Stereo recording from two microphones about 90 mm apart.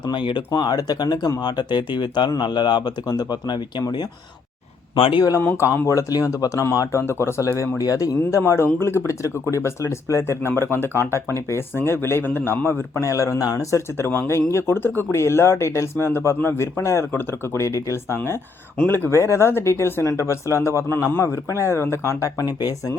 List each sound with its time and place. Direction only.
0.1 s speech: 60° left (ahead or behind)
4.9 s speech: 90° left
5.4 s a man's voice: 30° left (ahead or behind)
18.9 s a man's voice: 25° left (ahead or behind); by 23.0 s 40° left (ahead or behind)